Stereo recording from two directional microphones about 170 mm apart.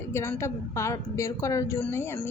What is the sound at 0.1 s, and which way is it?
A woman's voice, 15° left (ahead or behind).